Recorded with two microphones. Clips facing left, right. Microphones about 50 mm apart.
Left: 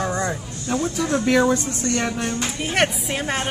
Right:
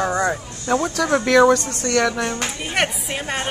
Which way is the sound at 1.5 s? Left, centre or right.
Right.